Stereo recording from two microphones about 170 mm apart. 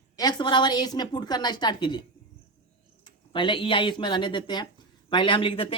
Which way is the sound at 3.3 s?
30° left (ahead or behind).